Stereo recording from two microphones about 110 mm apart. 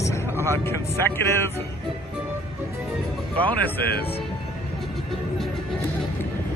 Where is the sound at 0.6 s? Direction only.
20° left (ahead or behind).